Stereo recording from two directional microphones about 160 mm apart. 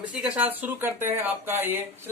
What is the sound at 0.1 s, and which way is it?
Speech, 5° right (ahead or behind).